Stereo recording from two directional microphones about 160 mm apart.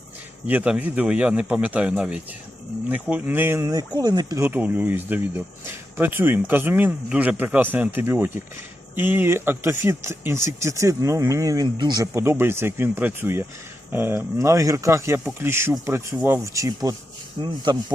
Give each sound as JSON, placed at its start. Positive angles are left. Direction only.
{"t": 0.4, "sound": "speech", "side_deg": -10}
{"t": 4.4, "sound": "speech", "side_deg": -10}